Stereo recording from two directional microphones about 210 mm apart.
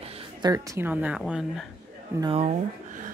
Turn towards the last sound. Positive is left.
turn(degrees=-35)  # may be behind; listen again after turning